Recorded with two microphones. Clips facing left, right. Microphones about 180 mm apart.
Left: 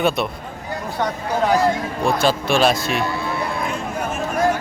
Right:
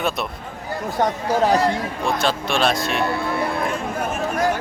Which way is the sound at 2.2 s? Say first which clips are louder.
Left 4 dB; 5° left (ahead or behind).